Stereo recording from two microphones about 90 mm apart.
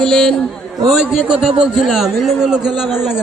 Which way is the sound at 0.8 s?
5° right (ahead or behind).